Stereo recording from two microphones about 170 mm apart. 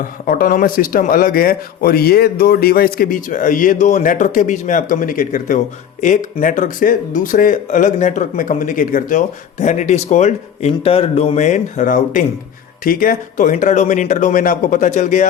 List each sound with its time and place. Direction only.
0.0 s a man's voice: 55° left (ahead or behind)